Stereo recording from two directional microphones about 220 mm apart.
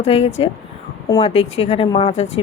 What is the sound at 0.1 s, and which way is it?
Speech, 25° left (ahead or behind).